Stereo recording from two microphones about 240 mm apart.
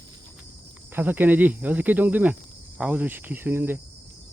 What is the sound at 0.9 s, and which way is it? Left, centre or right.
Speech, centre.